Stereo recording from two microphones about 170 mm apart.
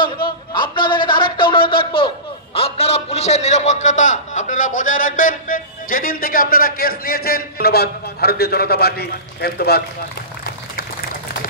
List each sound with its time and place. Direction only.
0.0 s speech: 30° left (ahead or behind); by 9.8 s 70° left (ahead or behind)